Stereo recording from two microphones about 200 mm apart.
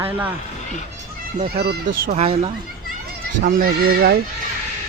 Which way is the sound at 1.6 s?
55° right (ahead or behind).